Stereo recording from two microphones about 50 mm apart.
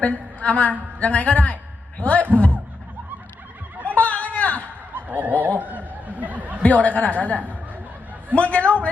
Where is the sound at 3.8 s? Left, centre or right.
Left.